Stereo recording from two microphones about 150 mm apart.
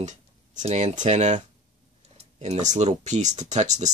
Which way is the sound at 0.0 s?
55° right (ahead or behind).